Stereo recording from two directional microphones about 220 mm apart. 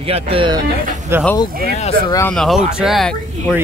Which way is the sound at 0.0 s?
25° right (ahead or behind).